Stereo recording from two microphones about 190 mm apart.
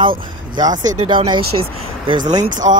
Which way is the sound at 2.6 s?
35° right (ahead or behind).